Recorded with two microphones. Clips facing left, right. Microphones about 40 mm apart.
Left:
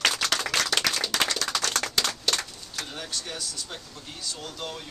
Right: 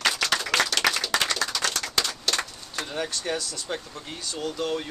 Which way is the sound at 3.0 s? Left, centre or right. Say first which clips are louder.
Right 10 dB; right.